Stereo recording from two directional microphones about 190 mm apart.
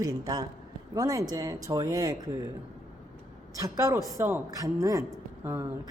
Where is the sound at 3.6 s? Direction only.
15° right (ahead or behind).